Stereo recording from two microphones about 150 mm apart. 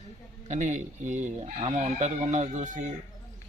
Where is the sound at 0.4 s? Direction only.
55° right (ahead or behind).